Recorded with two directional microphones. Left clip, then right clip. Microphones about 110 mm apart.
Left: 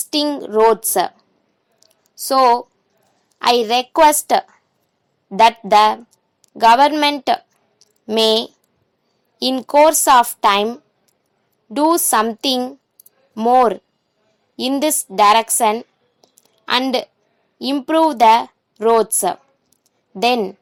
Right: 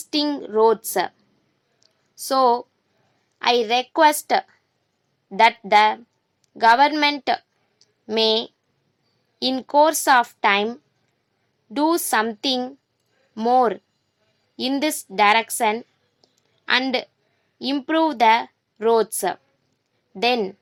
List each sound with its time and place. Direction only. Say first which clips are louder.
0.0 s a woman's voice: left 4 dB; 35° left (ahead or behind)
1.8 s a sound: left 5 dB; 20° left (ahead or behind)
3.3 s a woman's voice: left 4 dB; 30° left (ahead or behind)
8.1 s a woman's voice: left 5 dB; 35° left (ahead or behind)